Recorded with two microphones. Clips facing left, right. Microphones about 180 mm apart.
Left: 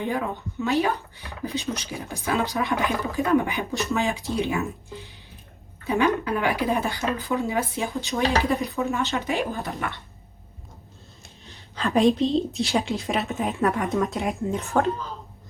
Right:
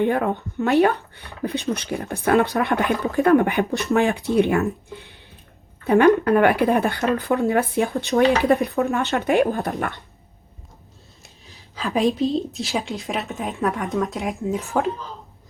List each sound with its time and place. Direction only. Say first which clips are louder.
0.0 s speech: right 7 dB; 55° right (ahead or behind)
4.9 s a sound: left 2 dB; 60° right (ahead or behind)
5.8 s a woman's voice: right 8 dB; 60° right (ahead or behind)
11.4 s a woman's voice: left 1 dB; 5° right (ahead or behind)